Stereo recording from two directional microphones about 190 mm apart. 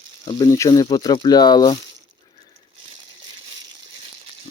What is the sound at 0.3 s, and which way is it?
Speech, 20° left (ahead or behind).